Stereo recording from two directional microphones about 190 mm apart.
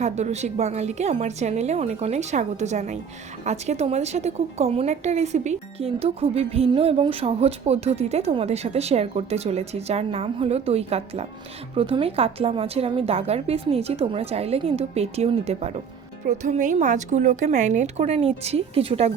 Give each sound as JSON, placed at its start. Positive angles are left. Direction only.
{"t": 0.0, "sound": "a woman's voice", "side_deg": -35}